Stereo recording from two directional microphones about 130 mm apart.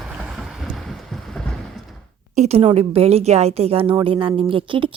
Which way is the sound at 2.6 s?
45° right (ahead or behind).